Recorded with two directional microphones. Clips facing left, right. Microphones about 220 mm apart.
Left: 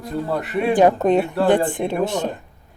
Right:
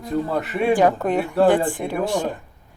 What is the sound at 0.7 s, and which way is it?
Speech, 20° left (ahead or behind).